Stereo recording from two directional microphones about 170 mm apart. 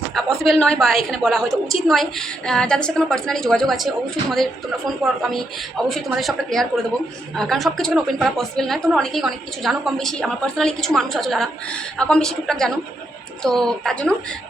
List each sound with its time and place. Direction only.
0.1 s a woman's voice: centre (ahead or behind)